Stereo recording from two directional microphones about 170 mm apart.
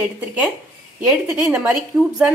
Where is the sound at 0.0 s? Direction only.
10° right (ahead or behind).